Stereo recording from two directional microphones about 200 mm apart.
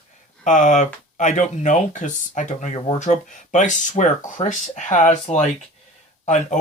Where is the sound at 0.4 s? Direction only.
40° left (ahead or behind).